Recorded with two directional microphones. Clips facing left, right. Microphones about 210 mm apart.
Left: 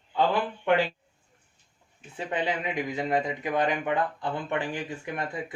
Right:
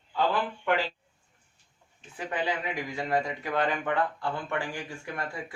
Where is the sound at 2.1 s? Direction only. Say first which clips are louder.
Left 2 dB; 25° left (ahead or behind).